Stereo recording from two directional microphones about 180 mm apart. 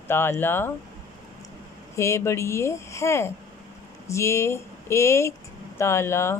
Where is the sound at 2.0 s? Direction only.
15° left (ahead or behind).